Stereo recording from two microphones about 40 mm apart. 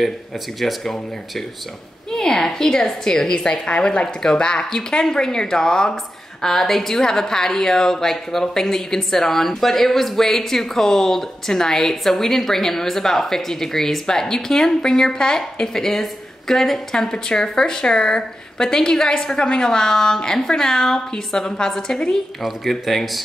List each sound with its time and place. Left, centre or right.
2.0 s a woman's voice: centre
6.4 s a woman's voice: centre
22.7 s speech: centre